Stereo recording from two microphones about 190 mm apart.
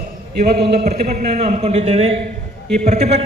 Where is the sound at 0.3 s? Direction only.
55° right (ahead or behind).